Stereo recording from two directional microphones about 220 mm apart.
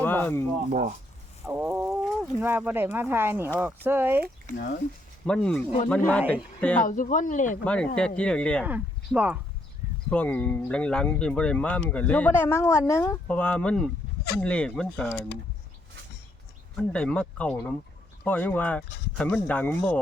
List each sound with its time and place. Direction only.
0.0 s a sound: 10° left (ahead or behind)
0.7 s speech: 35° right (ahead or behind)
1.5 s speech: 10° right (ahead or behind)
5.2 s speech: 5° left (ahead or behind)
6.7 s speech: 35° left (ahead or behind)
7.6 s speech: 5° left (ahead or behind)
8.6 s speech: 5° right (ahead or behind)
10.1 s speech: 5° left (ahead or behind)
16.7 s speech: 5° left (ahead or behind)